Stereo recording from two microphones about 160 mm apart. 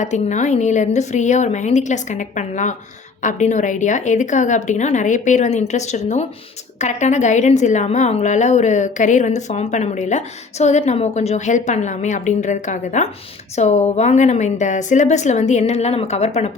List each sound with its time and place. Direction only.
0.0 s a woman's voice: 50° left (ahead or behind)